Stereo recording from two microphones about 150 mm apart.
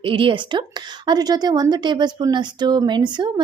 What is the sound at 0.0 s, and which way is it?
A woman's voice, 35° right (ahead or behind).